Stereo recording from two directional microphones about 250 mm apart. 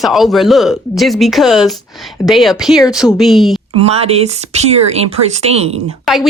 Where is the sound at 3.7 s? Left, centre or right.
Right.